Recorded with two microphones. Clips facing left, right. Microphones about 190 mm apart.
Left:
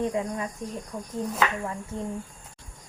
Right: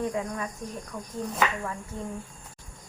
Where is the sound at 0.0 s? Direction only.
20° left (ahead or behind).